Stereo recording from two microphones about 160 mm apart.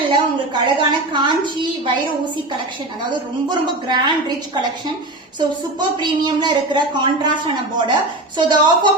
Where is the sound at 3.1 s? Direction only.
30° right (ahead or behind).